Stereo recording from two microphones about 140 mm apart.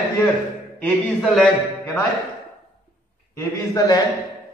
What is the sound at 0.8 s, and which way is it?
Speech, 5° left (ahead or behind).